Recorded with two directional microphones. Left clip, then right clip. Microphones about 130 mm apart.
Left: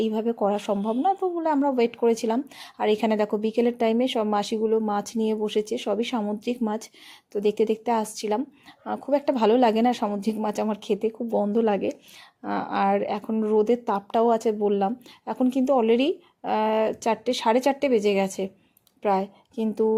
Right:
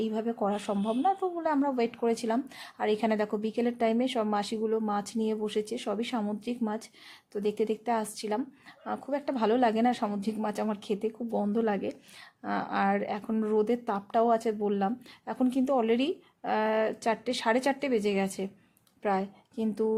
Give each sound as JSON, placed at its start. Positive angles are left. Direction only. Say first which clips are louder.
{"t": 0.0, "sound": "speech", "louder": "left 6 dB", "side_deg": 25}